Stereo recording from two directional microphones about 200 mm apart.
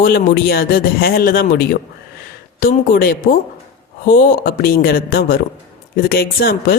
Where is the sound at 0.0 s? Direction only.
50° left (ahead or behind).